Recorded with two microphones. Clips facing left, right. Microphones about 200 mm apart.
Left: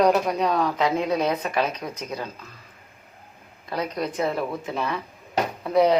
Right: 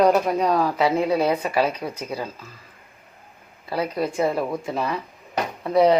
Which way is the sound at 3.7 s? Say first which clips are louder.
Right 3 dB; 5° right (ahead or behind).